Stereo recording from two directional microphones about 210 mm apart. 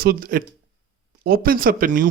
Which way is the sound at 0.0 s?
45° right (ahead or behind).